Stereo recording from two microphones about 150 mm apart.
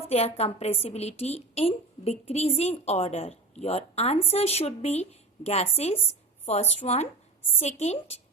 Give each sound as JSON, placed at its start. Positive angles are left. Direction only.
{"t": 0.1, "sound": "a woman's voice", "side_deg": 45}